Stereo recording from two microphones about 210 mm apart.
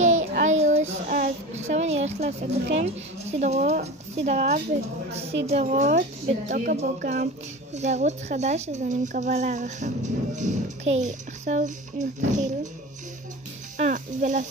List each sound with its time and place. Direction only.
0.0 s child singing: 35° right (ahead or behind)
1.5 s a woman's voice: 30° right (ahead or behind)
13.7 s speech: 35° right (ahead or behind)